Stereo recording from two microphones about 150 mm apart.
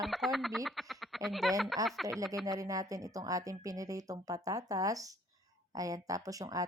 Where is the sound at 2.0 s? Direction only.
20° right (ahead or behind).